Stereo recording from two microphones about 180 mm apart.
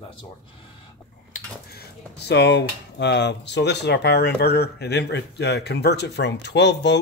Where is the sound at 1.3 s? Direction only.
60° left (ahead or behind).